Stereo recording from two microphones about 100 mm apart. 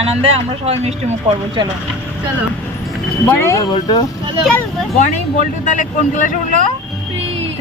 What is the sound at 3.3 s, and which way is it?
Speech, 25° left (ahead or behind).